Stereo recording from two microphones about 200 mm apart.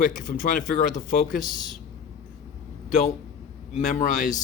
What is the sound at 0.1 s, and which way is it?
Speech, 40° left (ahead or behind).